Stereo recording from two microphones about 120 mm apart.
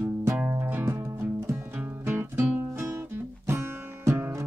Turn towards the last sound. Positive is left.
turn(degrees=-20)  # may be behind; listen again after turning